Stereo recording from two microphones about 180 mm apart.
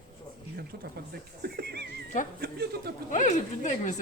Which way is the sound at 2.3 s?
60° right (ahead or behind).